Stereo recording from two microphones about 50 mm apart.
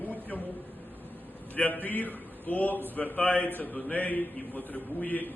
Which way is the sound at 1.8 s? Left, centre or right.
Left.